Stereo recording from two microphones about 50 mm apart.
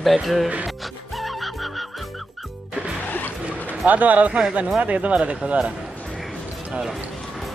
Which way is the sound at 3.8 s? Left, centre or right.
Right.